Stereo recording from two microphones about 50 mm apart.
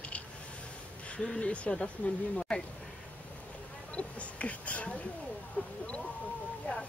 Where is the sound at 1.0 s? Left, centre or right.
Left.